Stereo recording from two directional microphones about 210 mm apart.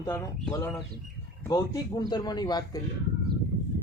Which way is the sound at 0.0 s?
15° left (ahead or behind).